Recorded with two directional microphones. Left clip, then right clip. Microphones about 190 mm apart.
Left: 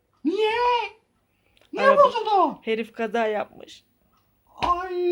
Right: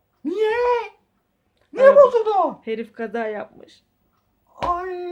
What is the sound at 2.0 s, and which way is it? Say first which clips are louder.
Speech: right 3 dB; 15° right (ahead or behind).